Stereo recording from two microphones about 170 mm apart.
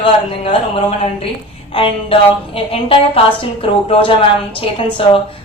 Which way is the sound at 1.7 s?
30° left (ahead or behind).